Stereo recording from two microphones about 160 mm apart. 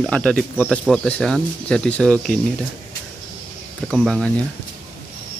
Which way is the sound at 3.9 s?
5° left (ahead or behind).